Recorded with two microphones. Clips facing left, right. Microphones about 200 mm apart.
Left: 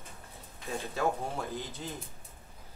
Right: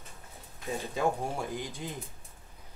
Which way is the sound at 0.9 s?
15° right (ahead or behind).